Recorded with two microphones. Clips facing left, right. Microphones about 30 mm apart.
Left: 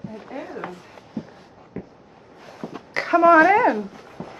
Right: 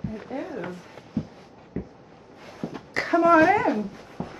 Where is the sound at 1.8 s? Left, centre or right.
Left.